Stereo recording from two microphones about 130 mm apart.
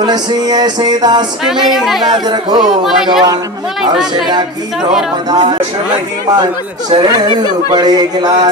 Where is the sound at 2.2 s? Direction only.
35° right (ahead or behind).